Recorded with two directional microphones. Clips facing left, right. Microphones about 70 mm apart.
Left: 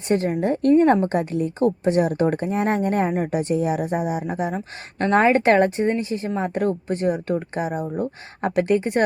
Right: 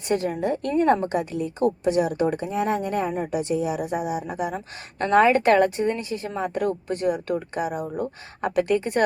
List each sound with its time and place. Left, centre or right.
0.1 s a woman's voice: left